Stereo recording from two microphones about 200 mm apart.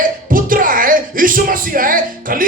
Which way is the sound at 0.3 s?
45° right (ahead or behind).